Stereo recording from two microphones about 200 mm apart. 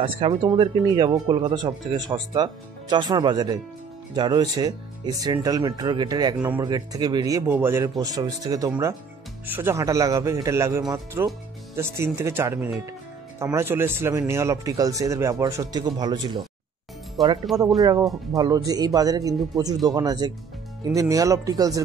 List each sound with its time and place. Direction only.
0.0 s speech: 25° right (ahead or behind)
17.5 s speech: centre (ahead or behind)
18.3 s speech: 20° right (ahead or behind)